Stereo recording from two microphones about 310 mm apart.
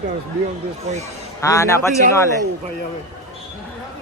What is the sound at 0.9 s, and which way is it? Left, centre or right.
Speech, right.